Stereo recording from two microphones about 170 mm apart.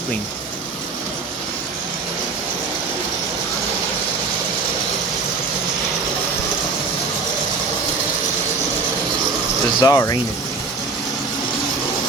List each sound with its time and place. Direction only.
9.8 s speech: 20° left (ahead or behind)